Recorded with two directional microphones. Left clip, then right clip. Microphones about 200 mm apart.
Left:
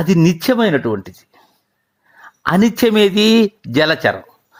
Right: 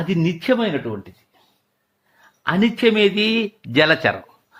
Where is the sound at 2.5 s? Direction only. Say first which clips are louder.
Left 3 dB; 25° left (ahead or behind).